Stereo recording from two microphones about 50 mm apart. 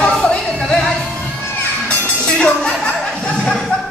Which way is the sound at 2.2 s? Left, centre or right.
Centre.